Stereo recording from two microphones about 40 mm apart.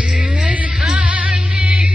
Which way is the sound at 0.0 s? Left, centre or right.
Right.